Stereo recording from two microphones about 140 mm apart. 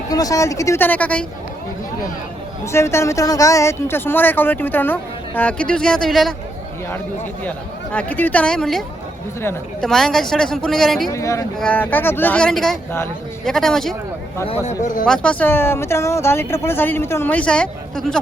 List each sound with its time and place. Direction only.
0.1 s speech: 25° left (ahead or behind); by 1.2 s 10° left (ahead or behind)
2.7 s speech: 20° left (ahead or behind); by 6.3 s centre (ahead or behind)
7.9 s speech: 10° left (ahead or behind)
9.8 s a woman's voice: centre (ahead or behind)
11.1 s a woman's voice: 20° left (ahead or behind); by 13.9 s 5° left (ahead or behind)
15.0 s speech: 5° left (ahead or behind)